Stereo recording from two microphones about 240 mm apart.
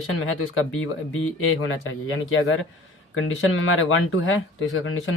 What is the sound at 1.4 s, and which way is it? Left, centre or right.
Speech, left.